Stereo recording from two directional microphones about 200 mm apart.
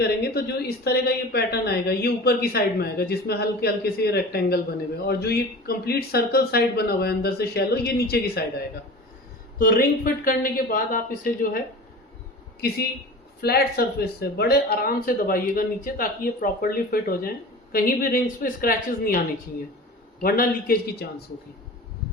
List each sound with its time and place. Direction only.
0.0 s speech: 50° left (ahead or behind)
9.6 s speech: 45° left (ahead or behind)
13.4 s speech: 50° left (ahead or behind)
20.2 s speech: 45° left (ahead or behind)